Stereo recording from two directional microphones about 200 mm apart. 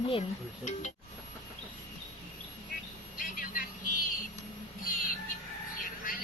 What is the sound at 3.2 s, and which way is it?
Vehicle, 45° left (ahead or behind).